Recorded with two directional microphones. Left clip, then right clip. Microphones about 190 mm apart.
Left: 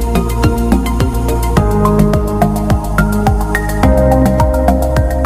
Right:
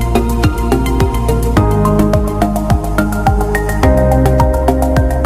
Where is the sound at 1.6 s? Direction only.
Centre (ahead or behind).